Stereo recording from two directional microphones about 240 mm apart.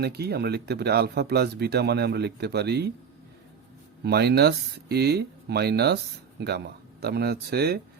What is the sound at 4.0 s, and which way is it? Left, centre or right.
Speech, right.